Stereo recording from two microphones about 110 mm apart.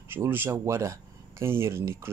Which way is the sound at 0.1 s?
20° right (ahead or behind).